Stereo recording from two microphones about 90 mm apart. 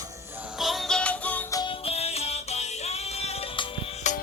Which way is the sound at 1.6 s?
90° left.